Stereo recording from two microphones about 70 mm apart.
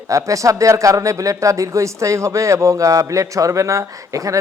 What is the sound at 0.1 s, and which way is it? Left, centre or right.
A man's voice, right.